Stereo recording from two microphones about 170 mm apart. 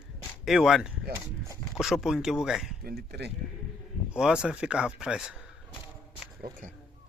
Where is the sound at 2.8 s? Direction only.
70° right (ahead or behind).